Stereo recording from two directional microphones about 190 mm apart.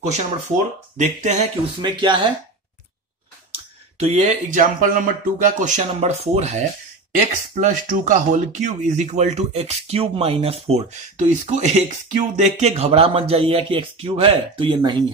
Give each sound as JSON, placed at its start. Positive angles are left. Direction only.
{"t": 0.9, "sound": "speech", "side_deg": -40}
{"t": 1.8, "sound": "speech", "side_deg": -25}
{"t": 4.0, "sound": "speech", "side_deg": -35}